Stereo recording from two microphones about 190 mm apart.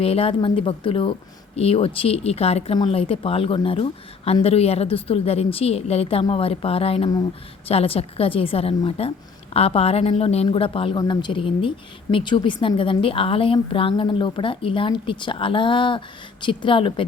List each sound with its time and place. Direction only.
0.0 s a woman's voice: 30° left (ahead or behind)